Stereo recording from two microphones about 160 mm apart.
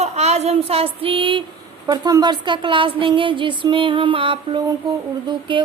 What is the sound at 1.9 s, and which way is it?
A woman's voice, 25° right (ahead or behind).